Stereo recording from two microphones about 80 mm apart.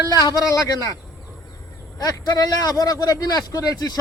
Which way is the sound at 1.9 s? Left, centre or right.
Left.